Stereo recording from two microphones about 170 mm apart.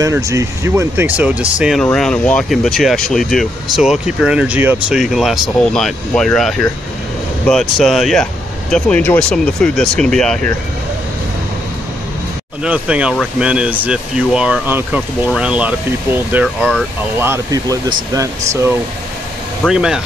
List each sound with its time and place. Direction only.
0.0 s speech: 15° right (ahead or behind); by 10.5 s 5° left (ahead or behind)
12.6 s speech: 5° right (ahead or behind)
19.6 s speech: 5° right (ahead or behind)